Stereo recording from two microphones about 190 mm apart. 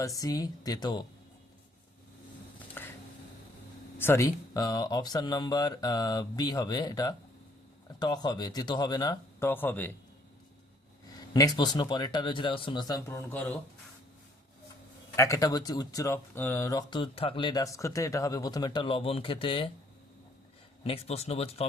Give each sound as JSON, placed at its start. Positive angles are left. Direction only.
{"t": 0.0, "sound": "speech", "side_deg": 20}
{"t": 2.8, "sound": "a sound", "side_deg": 10}
{"t": 3.9, "sound": "speech", "side_deg": 10}
{"t": 11.1, "sound": "speech", "side_deg": 20}
{"t": 15.1, "sound": "speech", "side_deg": 15}
{"t": 20.8, "sound": "speech", "side_deg": 30}